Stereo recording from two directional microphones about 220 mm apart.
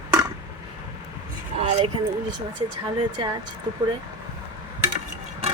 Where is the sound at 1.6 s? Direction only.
25° right (ahead or behind).